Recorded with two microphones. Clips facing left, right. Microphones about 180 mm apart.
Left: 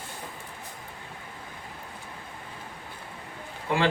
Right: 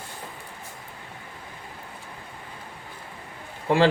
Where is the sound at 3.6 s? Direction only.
30° right (ahead or behind).